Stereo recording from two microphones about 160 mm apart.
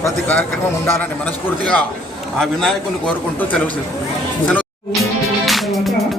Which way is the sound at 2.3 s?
5° left (ahead or behind).